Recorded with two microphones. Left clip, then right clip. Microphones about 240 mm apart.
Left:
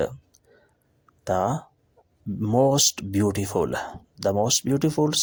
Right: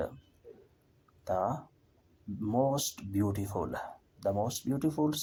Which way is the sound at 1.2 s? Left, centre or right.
Left.